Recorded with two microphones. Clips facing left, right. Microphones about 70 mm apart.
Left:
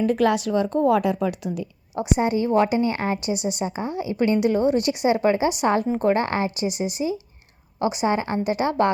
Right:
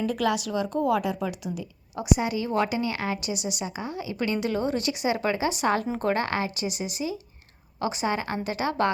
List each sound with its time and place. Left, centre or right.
0.0 s a woman's voice: left
2.1 s a woman's voice: left